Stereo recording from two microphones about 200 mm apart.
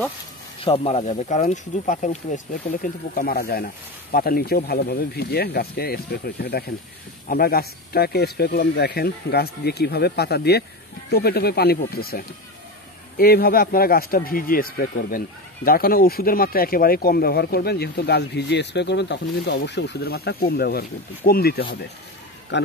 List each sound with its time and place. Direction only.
0.7 s speech: 30° left (ahead or behind); by 21.6 s 50° left (ahead or behind)
22.5 s speech: 60° left (ahead or behind)